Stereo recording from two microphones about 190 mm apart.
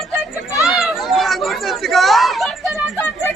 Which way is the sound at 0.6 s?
Centre (ahead or behind).